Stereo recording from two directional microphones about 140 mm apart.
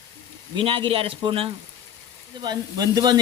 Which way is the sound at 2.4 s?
30° right (ahead or behind).